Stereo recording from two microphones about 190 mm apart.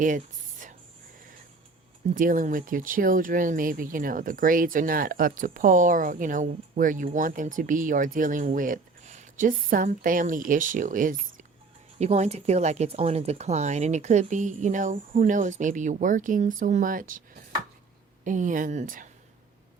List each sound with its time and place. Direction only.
0.0 s a sound: 45° right (ahead or behind)
2.1 s speech: 45° right (ahead or behind)
18.3 s speech: 40° right (ahead or behind)